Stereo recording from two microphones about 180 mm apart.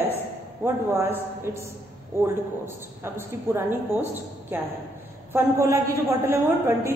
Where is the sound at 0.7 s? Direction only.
15° right (ahead or behind).